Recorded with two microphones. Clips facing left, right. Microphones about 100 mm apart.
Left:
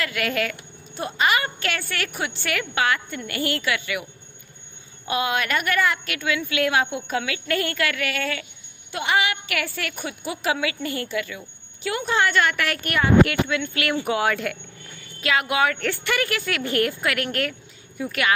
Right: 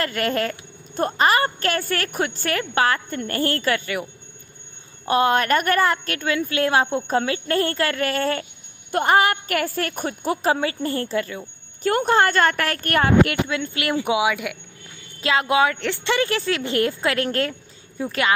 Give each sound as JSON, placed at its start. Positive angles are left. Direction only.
{"t": 0.0, "sound": "a woman's voice", "side_deg": -40}
{"t": 5.0, "sound": "a woman's voice", "side_deg": -40}
{"t": 13.9, "sound": "speech", "side_deg": -10}
{"t": 15.2, "sound": "speech", "side_deg": -30}